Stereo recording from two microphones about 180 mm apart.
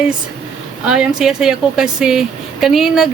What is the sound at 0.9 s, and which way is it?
A woman's voice, 5° right (ahead or behind).